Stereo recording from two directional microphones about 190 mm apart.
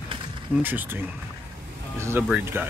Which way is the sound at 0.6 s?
10° right (ahead or behind).